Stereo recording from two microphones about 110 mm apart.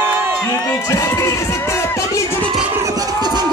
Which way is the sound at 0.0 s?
20° right (ahead or behind).